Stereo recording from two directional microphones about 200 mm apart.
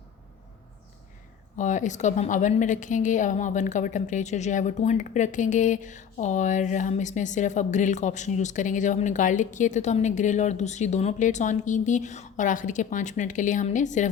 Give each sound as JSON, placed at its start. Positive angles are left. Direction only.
{"t": 1.5, "sound": "a woman's voice", "side_deg": 40}